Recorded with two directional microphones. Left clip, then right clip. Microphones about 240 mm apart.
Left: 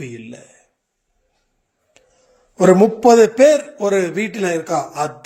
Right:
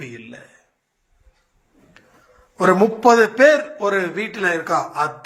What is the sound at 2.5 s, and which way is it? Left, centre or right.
A man's voice, left.